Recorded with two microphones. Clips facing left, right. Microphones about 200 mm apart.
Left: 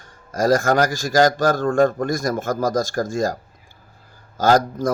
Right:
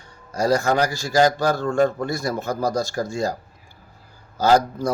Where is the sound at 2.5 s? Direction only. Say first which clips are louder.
Left 1 dB; 90° left.